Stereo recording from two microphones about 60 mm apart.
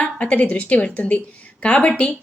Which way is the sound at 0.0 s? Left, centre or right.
Left.